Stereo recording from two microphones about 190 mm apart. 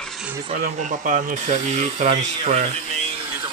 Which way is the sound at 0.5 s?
35° right (ahead or behind).